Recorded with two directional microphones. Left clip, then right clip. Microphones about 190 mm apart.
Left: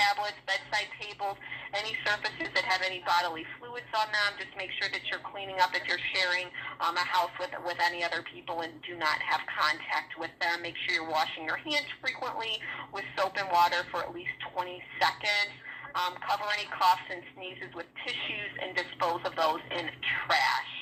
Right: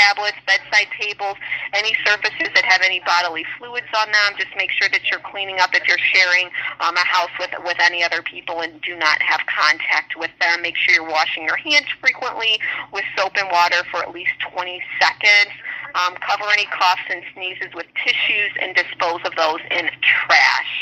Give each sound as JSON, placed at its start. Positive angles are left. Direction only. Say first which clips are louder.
{"t": 0.0, "sound": "a woman's voice", "louder": "right 13 dB", "side_deg": -30}